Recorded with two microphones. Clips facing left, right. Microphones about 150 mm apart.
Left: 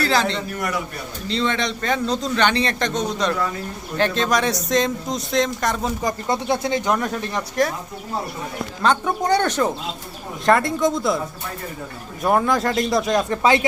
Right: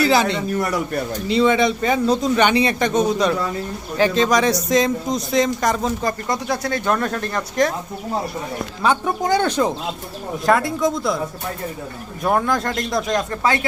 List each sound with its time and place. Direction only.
0.0 s a man's voice: 10° right (ahead or behind)
6.2 s speech: 25° left (ahead or behind)
8.8 s a man's voice: 5° right (ahead or behind)
10.4 s speech: centre (ahead or behind)
12.2 s speech: centre (ahead or behind)
13.3 s speech: 20° left (ahead or behind)